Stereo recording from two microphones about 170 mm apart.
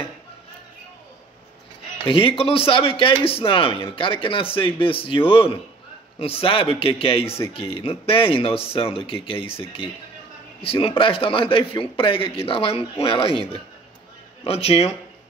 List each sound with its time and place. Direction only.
2.0 s a man's voice: 35° left (ahead or behind)
10.6 s a man's voice: 35° left (ahead or behind)